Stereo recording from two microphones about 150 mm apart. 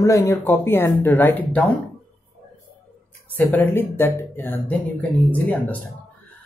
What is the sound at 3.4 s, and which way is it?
Speech, 15° left (ahead or behind).